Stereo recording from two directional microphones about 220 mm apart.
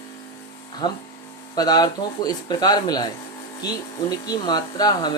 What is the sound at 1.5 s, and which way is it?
Speech, 15° left (ahead or behind).